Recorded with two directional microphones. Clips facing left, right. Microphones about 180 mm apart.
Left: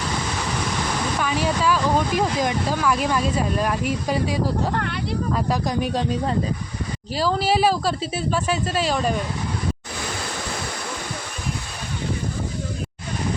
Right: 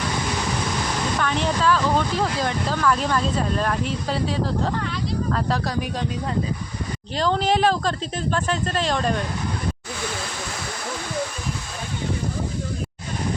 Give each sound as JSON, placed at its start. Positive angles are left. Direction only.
{"t": 1.2, "sound": "speech", "side_deg": 10}
{"t": 4.7, "sound": "speech", "side_deg": 60}
{"t": 5.3, "sound": "speech", "side_deg": 10}
{"t": 7.2, "sound": "speech", "side_deg": 5}